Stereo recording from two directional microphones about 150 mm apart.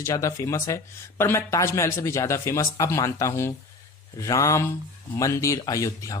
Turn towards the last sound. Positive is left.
turn(degrees=20)  # may be behind; listen again after turning